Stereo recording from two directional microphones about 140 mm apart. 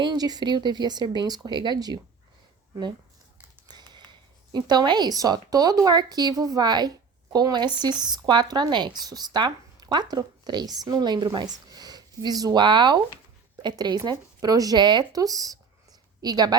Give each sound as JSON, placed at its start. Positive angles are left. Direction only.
{"t": 0.0, "sound": "speech", "side_deg": -30}
{"t": 3.7, "sound": "a sound", "side_deg": -30}
{"t": 4.5, "sound": "a woman's voice", "side_deg": -30}